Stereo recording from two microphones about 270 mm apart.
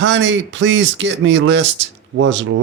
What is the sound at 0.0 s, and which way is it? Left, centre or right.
Speech, right.